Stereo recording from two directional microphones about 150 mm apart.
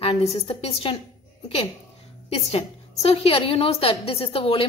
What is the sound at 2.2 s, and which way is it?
A woman's voice, 45° left (ahead or behind).